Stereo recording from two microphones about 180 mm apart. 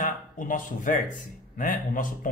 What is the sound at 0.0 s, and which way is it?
Speech, 50° left (ahead or behind).